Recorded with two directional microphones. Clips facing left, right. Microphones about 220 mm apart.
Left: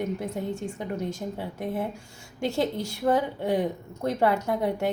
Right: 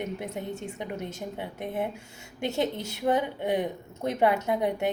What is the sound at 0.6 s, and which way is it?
Speech, 20° right (ahead or behind).